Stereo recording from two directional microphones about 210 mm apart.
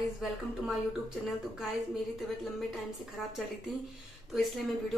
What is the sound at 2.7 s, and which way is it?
A woman's voice, centre (ahead or behind).